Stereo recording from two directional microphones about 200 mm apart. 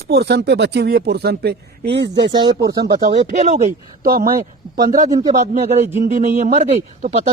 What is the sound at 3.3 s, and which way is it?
Speech, 35° right (ahead or behind).